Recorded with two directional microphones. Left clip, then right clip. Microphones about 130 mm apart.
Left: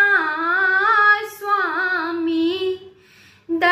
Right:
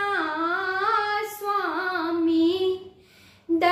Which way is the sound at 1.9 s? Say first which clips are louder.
Left 2 dB; 40° right (ahead or behind).